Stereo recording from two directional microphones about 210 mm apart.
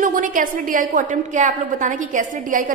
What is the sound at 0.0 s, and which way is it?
A woman's voice, 40° right (ahead or behind).